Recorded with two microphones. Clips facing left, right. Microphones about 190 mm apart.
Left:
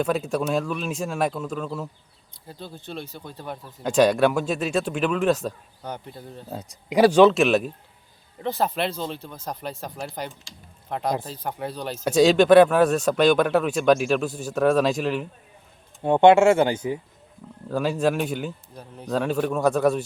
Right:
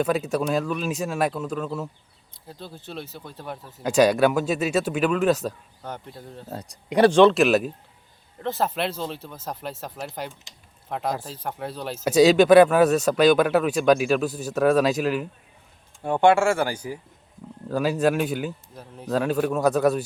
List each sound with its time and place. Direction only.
0.0 s speech: centre (ahead or behind)
10.5 s speech: 20° right (ahead or behind)
10.8 s speech: centre (ahead or behind)
16.0 s speech: 20° left (ahead or behind)
17.7 s speech: 5° right (ahead or behind)